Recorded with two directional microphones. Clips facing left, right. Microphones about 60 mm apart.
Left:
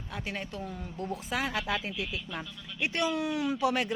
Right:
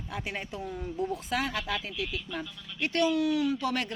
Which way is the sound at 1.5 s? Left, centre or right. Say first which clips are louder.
Left 1 dB; left.